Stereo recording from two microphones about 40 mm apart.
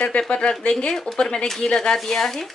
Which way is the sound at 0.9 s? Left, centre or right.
Centre.